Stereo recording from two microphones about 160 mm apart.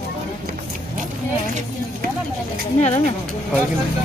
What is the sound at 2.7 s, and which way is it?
Speech, 45° left (ahead or behind).